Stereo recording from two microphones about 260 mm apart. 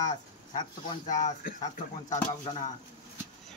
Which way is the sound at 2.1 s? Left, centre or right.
Left.